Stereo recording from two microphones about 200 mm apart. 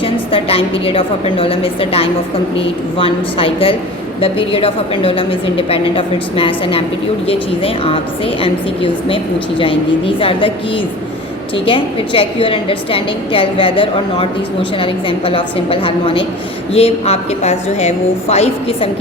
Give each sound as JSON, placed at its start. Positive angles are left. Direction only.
{"t": 0.0, "sound": "a woman's voice", "side_deg": 25}
{"t": 11.5, "sound": "a woman's voice", "side_deg": 25}